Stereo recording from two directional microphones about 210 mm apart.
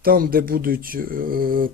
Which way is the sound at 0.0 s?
45° right (ahead or behind).